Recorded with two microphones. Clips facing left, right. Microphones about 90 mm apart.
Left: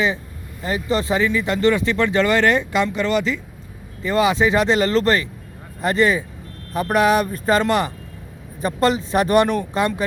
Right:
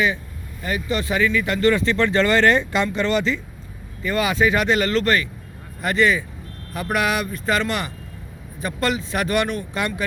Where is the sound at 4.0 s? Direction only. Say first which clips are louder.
Left 3 dB; 25° left (ahead or behind).